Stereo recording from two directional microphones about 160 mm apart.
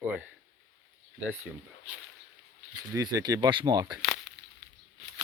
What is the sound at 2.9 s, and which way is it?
Speech, 25° right (ahead or behind).